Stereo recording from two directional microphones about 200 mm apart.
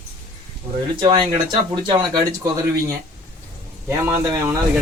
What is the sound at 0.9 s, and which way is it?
Speech, 20° right (ahead or behind).